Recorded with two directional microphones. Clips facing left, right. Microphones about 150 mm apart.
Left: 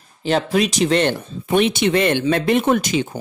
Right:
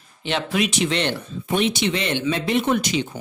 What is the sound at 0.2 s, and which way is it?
Speech, 40° left (ahead or behind).